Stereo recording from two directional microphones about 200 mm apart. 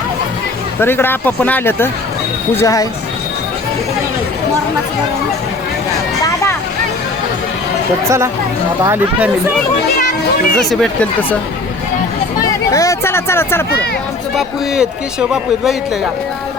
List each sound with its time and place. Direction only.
0.8 s speech: 10° left (ahead or behind)
6.2 s vehicle: 15° left (ahead or behind)
8.8 s speech: 10° right (ahead or behind)
10.0 s speech: 50° left (ahead or behind)
10.6 s a man's voice: centre (ahead or behind)
12.4 s speech: 15° left (ahead or behind)
14.3 s a man's voice: 5° right (ahead or behind)